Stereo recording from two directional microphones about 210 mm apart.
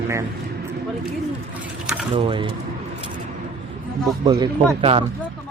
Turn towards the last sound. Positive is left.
turn(degrees=-25)  # may be behind; listen again after turning